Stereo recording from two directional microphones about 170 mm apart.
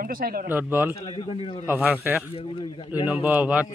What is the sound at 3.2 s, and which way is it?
Speech, 10° right (ahead or behind).